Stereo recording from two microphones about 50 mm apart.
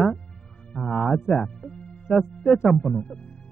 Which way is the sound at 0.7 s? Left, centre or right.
Centre.